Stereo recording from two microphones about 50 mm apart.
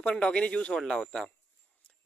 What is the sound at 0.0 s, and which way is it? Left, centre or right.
A man's voice, left.